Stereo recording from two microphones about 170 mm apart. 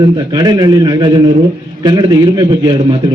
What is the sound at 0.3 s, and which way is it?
A man's voice, 25° right (ahead or behind).